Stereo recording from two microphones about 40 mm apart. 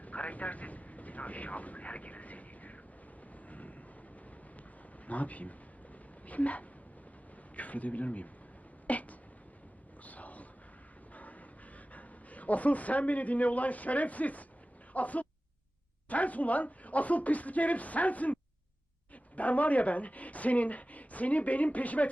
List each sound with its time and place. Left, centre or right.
0.0 s vehicle: left
5.0 s speech: left
8.9 s a sound: left
11.1 s vehicle: left
11.9 s speech: left
19.4 s speech: left